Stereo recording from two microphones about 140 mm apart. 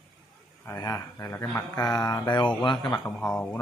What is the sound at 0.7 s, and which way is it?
Mantra, 25° left (ahead or behind).